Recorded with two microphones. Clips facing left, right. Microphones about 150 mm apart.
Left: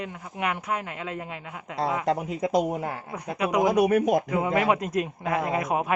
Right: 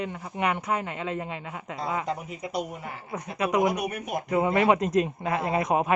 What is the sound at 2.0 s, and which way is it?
Speech, 90° left.